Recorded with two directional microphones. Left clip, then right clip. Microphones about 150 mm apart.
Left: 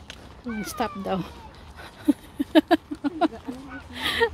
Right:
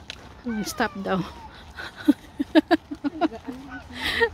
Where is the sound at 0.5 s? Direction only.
25° right (ahead or behind).